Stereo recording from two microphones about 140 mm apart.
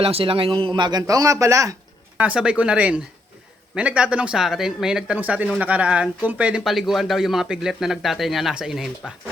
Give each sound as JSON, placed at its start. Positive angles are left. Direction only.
{"t": 0.0, "sound": "a man's voice", "side_deg": -45}
{"t": 2.1, "sound": "speech", "side_deg": -10}